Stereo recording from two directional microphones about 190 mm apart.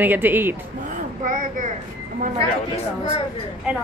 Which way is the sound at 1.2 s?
45° right (ahead or behind).